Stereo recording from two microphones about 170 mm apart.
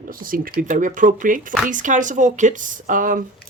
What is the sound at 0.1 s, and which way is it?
Speech, 55° right (ahead or behind).